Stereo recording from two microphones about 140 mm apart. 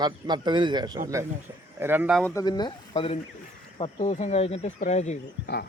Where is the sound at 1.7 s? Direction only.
15° right (ahead or behind).